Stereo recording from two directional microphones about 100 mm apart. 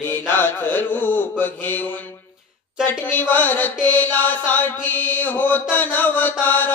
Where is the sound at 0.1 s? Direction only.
20° left (ahead or behind).